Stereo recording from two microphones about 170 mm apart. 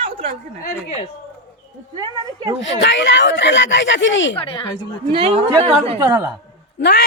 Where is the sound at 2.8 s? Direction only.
90° left.